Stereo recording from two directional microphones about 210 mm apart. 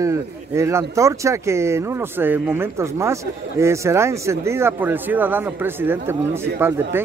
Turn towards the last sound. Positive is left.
turn(degrees=-10)  # may be behind; listen again after turning